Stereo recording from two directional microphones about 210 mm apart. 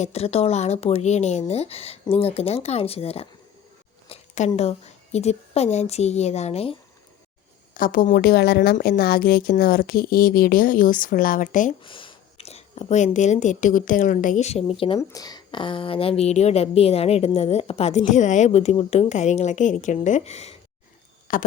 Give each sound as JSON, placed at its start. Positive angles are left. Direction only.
{"t": 0.0, "sound": "a woman's voice", "side_deg": 30}
{"t": 7.7, "sound": "a woman's voice", "side_deg": 40}
{"t": 11.8, "sound": "speech", "side_deg": 25}